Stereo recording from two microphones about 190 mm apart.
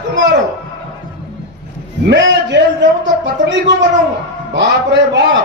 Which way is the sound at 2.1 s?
65° right (ahead or behind).